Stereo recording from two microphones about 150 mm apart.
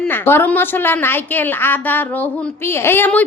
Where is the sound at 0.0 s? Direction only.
15° left (ahead or behind).